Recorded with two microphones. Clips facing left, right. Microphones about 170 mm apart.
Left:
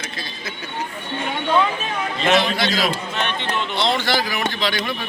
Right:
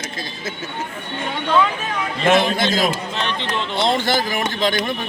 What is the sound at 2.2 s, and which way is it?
Speech, 50° right (ahead or behind).